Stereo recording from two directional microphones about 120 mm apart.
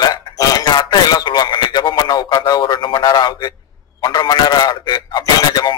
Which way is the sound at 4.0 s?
35° left (ahead or behind).